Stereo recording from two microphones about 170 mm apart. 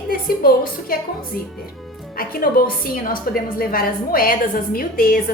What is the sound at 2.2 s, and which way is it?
A woman's voice, 60° left (ahead or behind).